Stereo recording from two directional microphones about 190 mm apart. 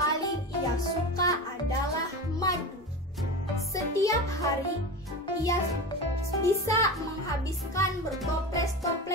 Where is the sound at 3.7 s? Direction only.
15° left (ahead or behind).